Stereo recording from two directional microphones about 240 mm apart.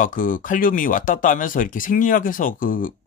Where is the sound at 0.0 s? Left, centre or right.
Left.